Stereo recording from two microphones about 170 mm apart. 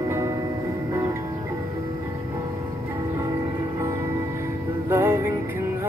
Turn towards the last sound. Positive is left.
turn(degrees=-15)  # may be behind; listen again after turning